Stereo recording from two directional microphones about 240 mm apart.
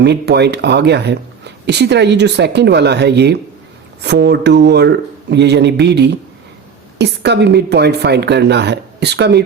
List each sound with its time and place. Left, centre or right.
0.0 s a woman's voice: right